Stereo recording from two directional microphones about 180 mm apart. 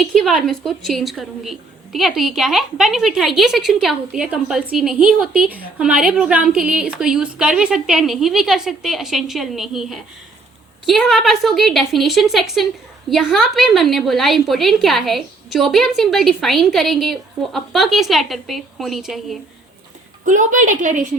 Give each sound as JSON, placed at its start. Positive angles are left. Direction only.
{"t": 0.1, "sound": "a woman's voice", "side_deg": 0}
{"t": 20.2, "sound": "a woman's voice", "side_deg": -45}